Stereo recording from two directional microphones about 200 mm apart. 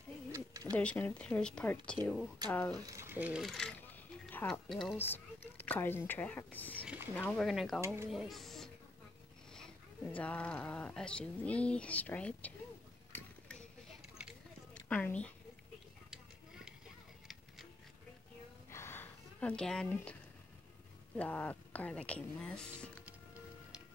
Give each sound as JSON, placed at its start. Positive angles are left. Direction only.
{"t": 0.3, "sound": "owl", "side_deg": -15}
{"t": 0.7, "sound": "speech", "side_deg": 5}
{"t": 2.7, "sound": "speech", "side_deg": -15}
{"t": 7.8, "sound": "speech", "side_deg": -15}
{"t": 8.1, "sound": "speech", "side_deg": 0}
{"t": 13.1, "sound": "a sound", "side_deg": 5}
{"t": 14.7, "sound": "a sound", "side_deg": 5}
{"t": 18.7, "sound": "a sound", "side_deg": 10}
{"t": 21.2, "sound": "speech", "side_deg": 10}